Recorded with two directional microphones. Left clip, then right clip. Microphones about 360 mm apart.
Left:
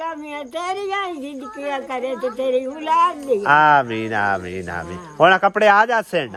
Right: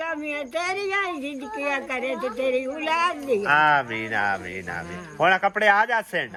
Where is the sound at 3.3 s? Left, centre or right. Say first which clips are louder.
Left 5 dB; centre.